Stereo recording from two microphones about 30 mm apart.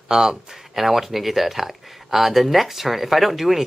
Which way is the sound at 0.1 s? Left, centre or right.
Right.